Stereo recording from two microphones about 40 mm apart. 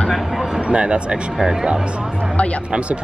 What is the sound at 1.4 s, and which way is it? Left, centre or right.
Speech, centre.